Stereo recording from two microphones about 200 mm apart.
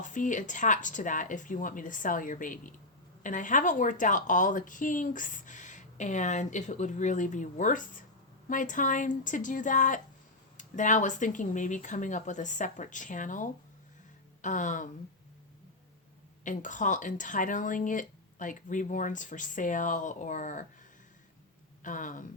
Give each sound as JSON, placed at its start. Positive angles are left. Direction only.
{"t": 0.0, "sound": "a woman's voice", "side_deg": 40}
{"t": 16.4, "sound": "a woman's voice", "side_deg": 40}
{"t": 21.8, "sound": "a woman's voice", "side_deg": 40}